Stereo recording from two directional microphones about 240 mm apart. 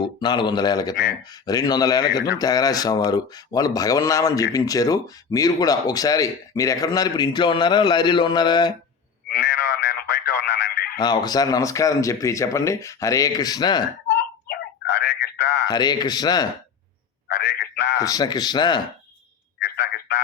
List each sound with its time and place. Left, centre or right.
0.2 s speech: centre
9.3 s radio: left
10.9 s speech: centre
14.4 s a sound: left
15.6 s speech: centre
17.2 s telephone: left
17.9 s speech: centre
19.5 s telephone: left